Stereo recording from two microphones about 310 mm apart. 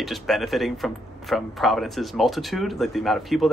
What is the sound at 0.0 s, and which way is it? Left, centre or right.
Speech, centre.